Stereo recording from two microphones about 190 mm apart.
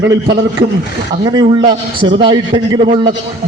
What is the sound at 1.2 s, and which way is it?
A man's voice, 20° right (ahead or behind).